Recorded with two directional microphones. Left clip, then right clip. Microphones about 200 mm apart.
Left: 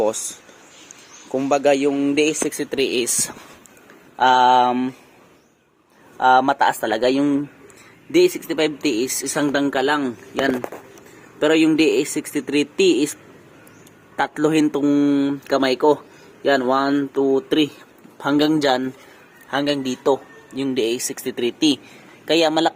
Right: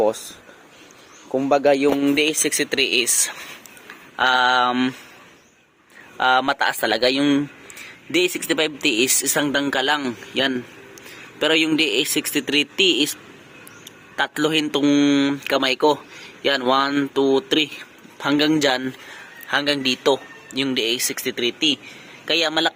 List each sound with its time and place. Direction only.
1.3 s speech: 5° left (ahead or behind)
6.1 s speech: 5° left (ahead or behind)
8.4 s speech: centre (ahead or behind)
14.2 s a man's voice: 5° left (ahead or behind); by 21.8 s 25° left (ahead or behind)
22.3 s speech: 15° left (ahead or behind)